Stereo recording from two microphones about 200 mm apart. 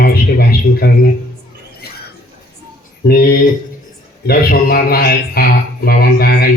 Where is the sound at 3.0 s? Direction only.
50° left (ahead or behind).